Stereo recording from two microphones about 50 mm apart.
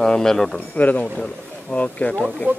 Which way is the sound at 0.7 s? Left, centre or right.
Left.